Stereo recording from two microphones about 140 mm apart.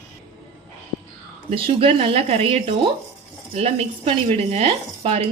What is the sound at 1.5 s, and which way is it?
Speech, 40° right (ahead or behind).